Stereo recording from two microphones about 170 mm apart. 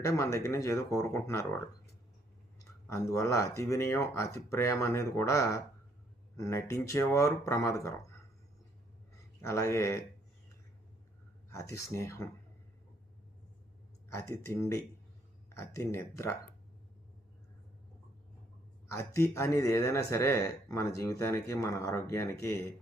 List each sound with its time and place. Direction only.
0.0 s speech: 15° left (ahead or behind)
2.6 s speech: 15° left (ahead or behind)
9.4 s speech: 15° left (ahead or behind)
11.5 s speech: 15° left (ahead or behind)
14.1 s speech: 15° left (ahead or behind)
18.9 s speech: 15° left (ahead or behind)